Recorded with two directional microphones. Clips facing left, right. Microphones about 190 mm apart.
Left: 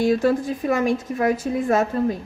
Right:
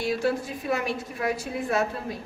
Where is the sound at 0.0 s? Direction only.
45° left (ahead or behind).